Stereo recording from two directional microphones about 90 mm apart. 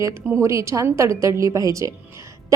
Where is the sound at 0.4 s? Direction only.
35° right (ahead or behind).